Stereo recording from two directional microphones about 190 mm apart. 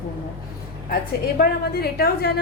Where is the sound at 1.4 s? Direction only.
55° left (ahead or behind).